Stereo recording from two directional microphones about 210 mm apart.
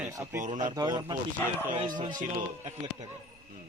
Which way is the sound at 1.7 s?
35° right (ahead or behind).